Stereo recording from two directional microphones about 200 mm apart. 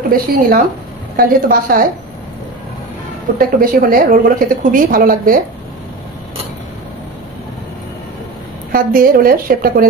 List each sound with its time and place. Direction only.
0.1 s a woman's voice: 45° right (ahead or behind)
3.3 s a woman's voice: 45° right (ahead or behind)
8.7 s a woman's voice: 45° right (ahead or behind)